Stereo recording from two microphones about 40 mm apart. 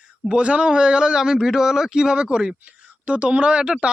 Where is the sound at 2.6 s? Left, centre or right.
Right.